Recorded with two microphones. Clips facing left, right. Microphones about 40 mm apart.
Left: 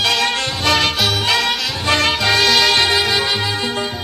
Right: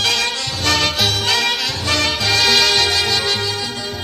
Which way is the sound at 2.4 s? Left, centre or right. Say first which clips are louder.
Even; centre.